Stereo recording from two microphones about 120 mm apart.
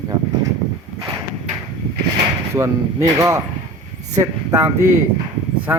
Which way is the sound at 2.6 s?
25° right (ahead or behind).